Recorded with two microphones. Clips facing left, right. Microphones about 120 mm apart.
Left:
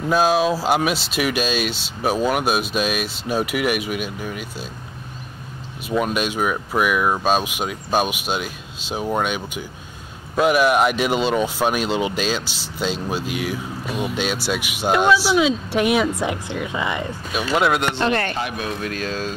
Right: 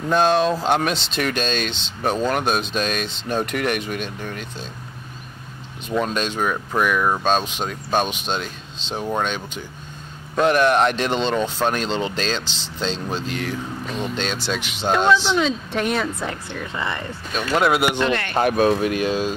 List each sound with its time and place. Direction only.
0.1 s speech: 5° left (ahead or behind)
5.9 s speech: 10° left (ahead or behind)
18.3 s speech: 50° right (ahead or behind)
18.8 s speech: 15° right (ahead or behind)